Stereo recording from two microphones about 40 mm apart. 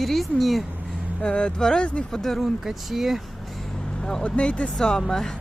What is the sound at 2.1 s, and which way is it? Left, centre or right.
Speech, centre.